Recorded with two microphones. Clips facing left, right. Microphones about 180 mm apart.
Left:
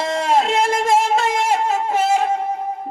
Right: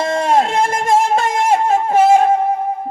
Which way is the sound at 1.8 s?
55° right (ahead or behind).